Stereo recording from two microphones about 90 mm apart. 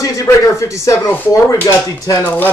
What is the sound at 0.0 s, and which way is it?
Speech, 35° left (ahead or behind).